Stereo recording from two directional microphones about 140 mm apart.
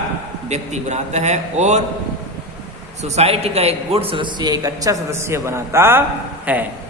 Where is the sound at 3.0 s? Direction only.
50° right (ahead or behind); by 6.7 s 10° right (ahead or behind).